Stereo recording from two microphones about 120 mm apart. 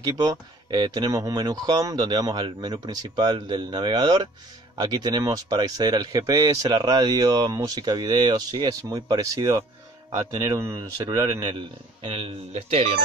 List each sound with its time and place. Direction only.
0.0 s speech: 30° right (ahead or behind)
12.1 s speech: 55° right (ahead or behind)